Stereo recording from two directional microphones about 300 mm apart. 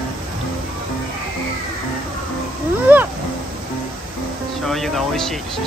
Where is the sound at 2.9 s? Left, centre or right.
Centre.